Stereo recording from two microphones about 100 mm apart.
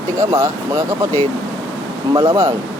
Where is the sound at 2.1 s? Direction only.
35° right (ahead or behind).